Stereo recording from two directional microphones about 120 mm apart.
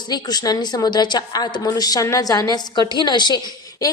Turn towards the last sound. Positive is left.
turn(degrees=35)  # may be behind; listen again after turning